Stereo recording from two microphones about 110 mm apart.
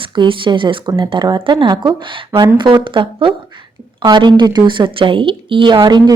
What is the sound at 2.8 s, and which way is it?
A woman's voice, 50° right (ahead or behind).